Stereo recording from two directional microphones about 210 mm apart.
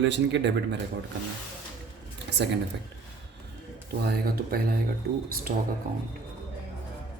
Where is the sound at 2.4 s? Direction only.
55° right (ahead or behind).